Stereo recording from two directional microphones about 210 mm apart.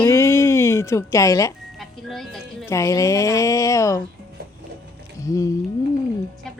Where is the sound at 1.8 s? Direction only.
Centre (ahead or behind).